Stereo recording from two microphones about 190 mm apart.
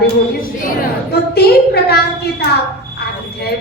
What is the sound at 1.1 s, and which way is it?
Speech, 55° left (ahead or behind).